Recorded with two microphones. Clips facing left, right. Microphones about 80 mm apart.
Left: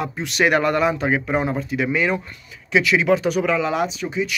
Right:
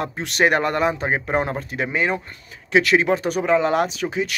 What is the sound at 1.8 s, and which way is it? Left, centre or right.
Speech, right.